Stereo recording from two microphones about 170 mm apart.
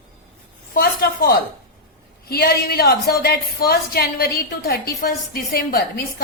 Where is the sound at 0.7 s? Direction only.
60° left (ahead or behind).